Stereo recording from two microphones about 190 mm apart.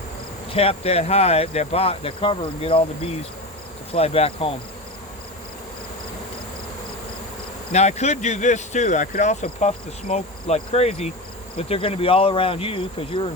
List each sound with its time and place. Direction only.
0.5 s speech: 30° left (ahead or behind)
7.7 s speech: 35° left (ahead or behind)
11.5 s cricket: 30° left (ahead or behind)